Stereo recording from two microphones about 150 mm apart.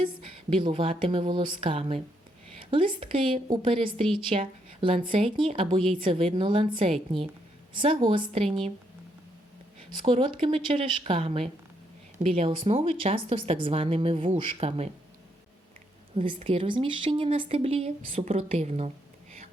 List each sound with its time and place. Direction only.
0.5 s a woman's voice: 35° right (ahead or behind)
10.0 s a woman's voice: 35° right (ahead or behind)
16.1 s a woman's voice: 35° right (ahead or behind)